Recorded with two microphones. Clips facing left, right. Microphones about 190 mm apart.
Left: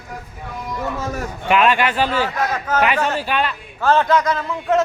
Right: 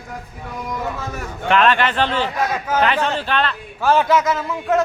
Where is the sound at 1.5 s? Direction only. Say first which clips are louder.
Even; 10° left (ahead or behind).